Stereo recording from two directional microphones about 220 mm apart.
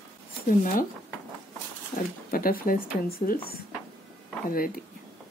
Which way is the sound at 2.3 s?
40° left (ahead or behind).